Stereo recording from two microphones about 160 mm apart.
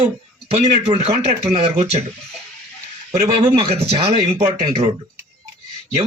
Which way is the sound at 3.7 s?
40° right (ahead or behind).